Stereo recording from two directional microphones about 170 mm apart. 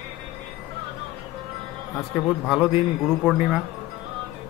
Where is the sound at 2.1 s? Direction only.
Centre (ahead or behind).